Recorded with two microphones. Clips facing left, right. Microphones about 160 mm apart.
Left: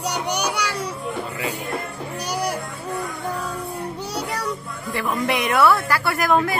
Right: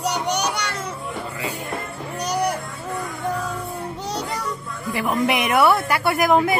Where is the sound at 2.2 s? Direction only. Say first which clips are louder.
Right 3 dB; 10° left (ahead or behind).